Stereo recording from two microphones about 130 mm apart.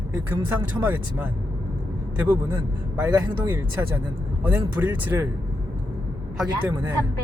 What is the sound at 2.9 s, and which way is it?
Speech, 15° right (ahead or behind).